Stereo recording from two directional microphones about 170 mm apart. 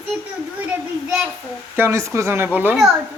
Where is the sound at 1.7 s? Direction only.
15° right (ahead or behind).